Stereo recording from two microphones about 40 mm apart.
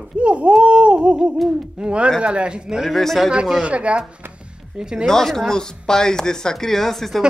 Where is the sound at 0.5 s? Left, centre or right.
Right.